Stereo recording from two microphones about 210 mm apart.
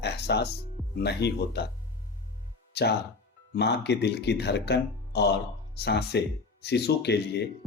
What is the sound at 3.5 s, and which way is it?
Speech, 55° left (ahead or behind).